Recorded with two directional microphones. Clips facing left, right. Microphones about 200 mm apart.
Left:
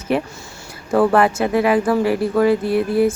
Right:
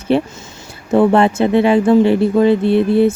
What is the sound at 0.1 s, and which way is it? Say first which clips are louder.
Speech: right 5 dB; 30° right (ahead or behind).